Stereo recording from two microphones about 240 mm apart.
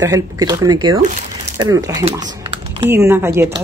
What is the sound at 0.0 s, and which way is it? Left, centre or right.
Speech, centre.